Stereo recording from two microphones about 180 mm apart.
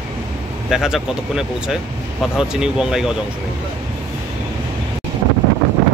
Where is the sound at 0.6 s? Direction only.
5° right (ahead or behind).